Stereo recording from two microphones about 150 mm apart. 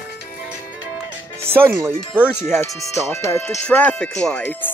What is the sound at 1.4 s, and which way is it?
Speech, 15° right (ahead or behind).